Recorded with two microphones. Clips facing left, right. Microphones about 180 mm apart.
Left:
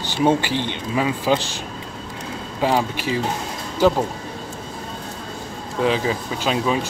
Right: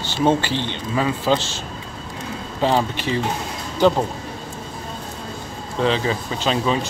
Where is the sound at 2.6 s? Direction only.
10° left (ahead or behind).